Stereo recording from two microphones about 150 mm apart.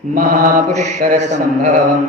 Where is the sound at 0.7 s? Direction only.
50° right (ahead or behind).